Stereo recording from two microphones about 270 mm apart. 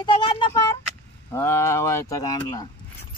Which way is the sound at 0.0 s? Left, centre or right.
Centre.